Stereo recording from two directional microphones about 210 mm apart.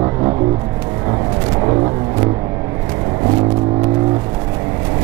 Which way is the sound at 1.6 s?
20° right (ahead or behind).